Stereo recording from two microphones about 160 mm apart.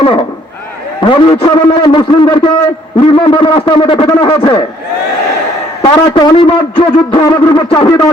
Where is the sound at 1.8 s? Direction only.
30° left (ahead or behind).